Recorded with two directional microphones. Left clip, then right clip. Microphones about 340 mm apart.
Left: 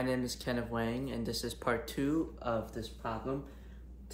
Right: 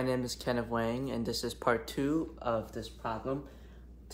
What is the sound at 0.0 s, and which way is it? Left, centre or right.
Speech, centre.